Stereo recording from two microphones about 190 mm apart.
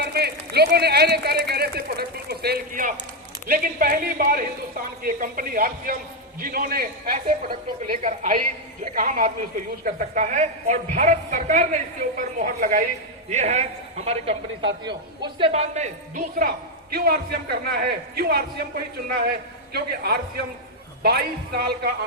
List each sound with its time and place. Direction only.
0.0 s a woman's voice: 55° right (ahead or behind)
13.3 s a woman's voice: 35° right (ahead or behind)
14.6 s a man's voice: 70° right (ahead or behind)
15.2 s a woman's voice: 25° right (ahead or behind)
16.4 s a man's voice: 50° right (ahead or behind)